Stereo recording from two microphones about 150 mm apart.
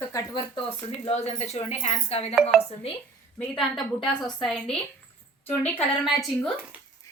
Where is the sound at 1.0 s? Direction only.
45° left (ahead or behind).